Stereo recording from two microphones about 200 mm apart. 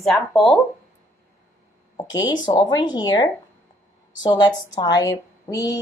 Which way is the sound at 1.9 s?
20° left (ahead or behind).